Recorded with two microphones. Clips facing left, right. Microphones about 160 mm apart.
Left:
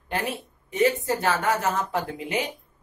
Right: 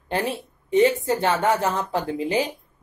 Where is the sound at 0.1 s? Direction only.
30° right (ahead or behind).